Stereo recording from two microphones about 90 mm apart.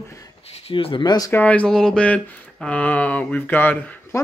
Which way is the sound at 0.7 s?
85° left.